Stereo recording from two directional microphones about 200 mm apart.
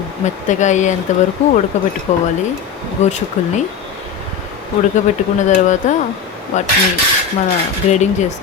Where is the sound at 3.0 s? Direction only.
35° left (ahead or behind).